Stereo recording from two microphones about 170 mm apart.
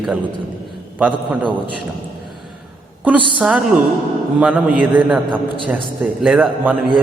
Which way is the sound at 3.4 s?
5° right (ahead or behind).